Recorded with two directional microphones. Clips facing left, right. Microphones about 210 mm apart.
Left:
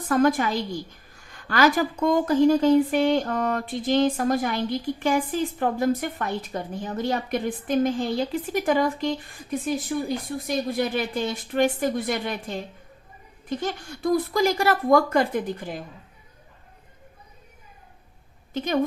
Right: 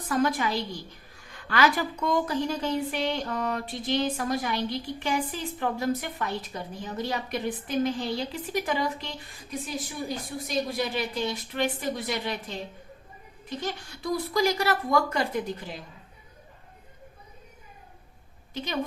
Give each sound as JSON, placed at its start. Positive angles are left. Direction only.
{"t": 0.1, "sound": "a woman's voice", "side_deg": 50}
{"t": 13.6, "sound": "a woman's voice", "side_deg": 50}
{"t": 18.5, "sound": "a woman's voice", "side_deg": 50}